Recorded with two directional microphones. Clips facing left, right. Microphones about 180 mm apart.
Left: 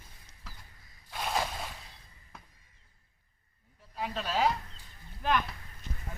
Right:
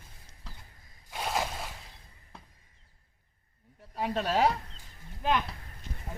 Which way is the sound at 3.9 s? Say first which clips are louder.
Right 4 dB; 40° right (ahead or behind).